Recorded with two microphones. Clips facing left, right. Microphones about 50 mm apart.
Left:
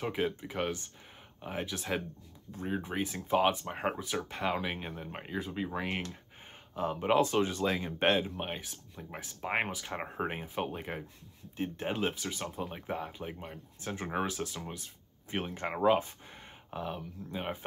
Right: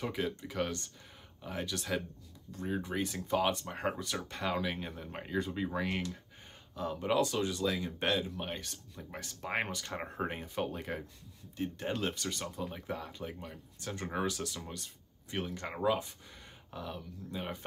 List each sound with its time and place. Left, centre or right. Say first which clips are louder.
0.0 s speech: left 3 dB; centre
6.7 s speech: left 4 dB; left
15.3 s speech: left 3 dB; left